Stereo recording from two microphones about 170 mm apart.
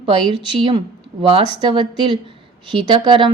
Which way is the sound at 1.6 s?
30° right (ahead or behind).